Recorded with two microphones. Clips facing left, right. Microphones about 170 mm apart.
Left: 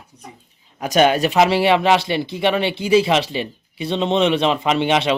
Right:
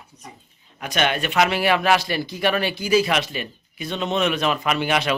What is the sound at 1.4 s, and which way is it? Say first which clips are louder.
Speech: left 4 dB; 25° left (ahead or behind).